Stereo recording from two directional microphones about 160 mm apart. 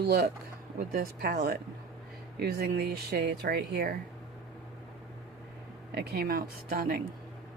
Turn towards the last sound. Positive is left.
turn(degrees=-65)  # may be behind; listen again after turning